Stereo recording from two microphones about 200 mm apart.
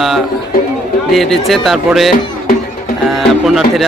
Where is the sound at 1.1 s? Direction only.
Centre (ahead or behind).